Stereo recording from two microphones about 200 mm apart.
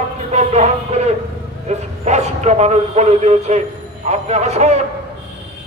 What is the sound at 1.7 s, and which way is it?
Speech, 35° right (ahead or behind).